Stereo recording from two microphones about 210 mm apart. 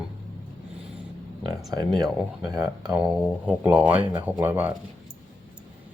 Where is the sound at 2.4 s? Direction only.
20° right (ahead or behind).